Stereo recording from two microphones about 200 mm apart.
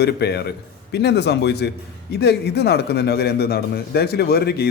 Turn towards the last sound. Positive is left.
turn(degrees=50)  # may be behind; listen again after turning